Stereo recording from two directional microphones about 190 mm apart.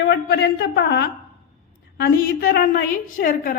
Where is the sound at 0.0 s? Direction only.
60° left (ahead or behind).